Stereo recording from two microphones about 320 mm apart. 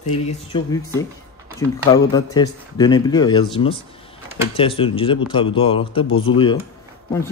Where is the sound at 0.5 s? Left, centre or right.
Centre.